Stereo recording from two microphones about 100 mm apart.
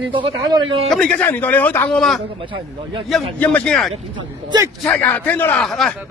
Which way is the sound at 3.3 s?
15° left (ahead or behind).